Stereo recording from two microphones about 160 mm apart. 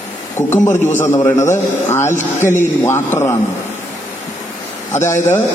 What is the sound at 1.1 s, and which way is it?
A man's voice, 20° left (ahead or behind).